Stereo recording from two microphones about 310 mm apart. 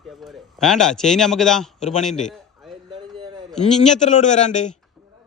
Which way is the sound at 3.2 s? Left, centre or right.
Centre.